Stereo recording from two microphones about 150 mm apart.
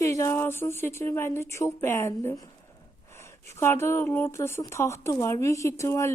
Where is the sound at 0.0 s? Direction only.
20° left (ahead or behind).